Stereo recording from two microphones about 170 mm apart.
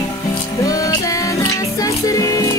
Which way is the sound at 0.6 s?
20° left (ahead or behind).